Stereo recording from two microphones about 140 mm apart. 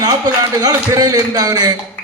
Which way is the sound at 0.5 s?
25° right (ahead or behind).